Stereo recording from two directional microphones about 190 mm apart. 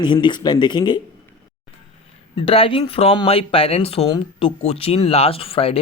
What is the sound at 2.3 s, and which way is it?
Speech, 30° left (ahead or behind).